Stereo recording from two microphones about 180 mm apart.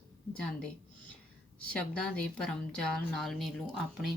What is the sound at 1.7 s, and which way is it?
Speech, 5° left (ahead or behind).